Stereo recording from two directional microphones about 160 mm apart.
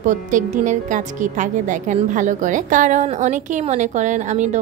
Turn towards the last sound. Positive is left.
turn(degrees=-45)  # may be behind; listen again after turning